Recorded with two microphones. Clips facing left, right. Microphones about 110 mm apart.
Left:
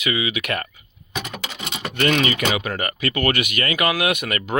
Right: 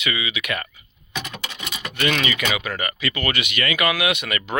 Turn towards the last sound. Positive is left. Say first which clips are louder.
# left 1 dB
turn(degrees=40)  # may be behind; listen again after turning